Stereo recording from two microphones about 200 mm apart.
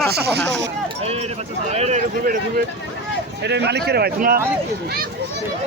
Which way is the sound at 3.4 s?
55° right (ahead or behind).